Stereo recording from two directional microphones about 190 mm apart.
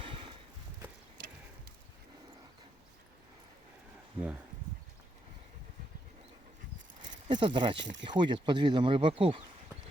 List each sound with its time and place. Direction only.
7.3 s speech: 25° right (ahead or behind)